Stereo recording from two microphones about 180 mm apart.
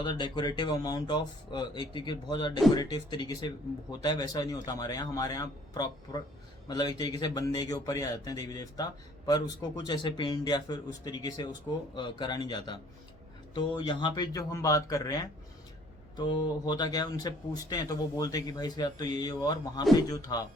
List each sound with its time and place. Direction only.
0.0 s a man's voice: 25° left (ahead or behind)